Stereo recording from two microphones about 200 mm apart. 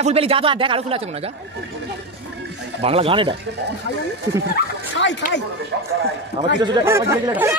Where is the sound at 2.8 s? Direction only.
30° right (ahead or behind).